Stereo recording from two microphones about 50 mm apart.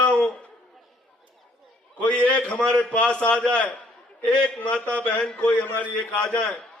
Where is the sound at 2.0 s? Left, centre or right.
Left.